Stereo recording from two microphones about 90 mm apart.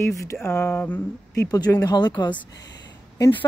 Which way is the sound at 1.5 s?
45° left (ahead or behind).